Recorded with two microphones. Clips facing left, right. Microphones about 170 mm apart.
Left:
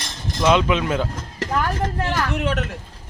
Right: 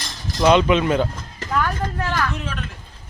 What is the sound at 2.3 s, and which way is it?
Speech, 65° left (ahead or behind).